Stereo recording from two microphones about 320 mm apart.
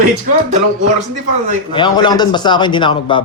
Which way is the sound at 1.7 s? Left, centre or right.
Centre.